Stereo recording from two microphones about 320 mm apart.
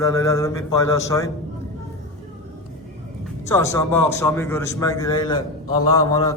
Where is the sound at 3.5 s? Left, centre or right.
Centre.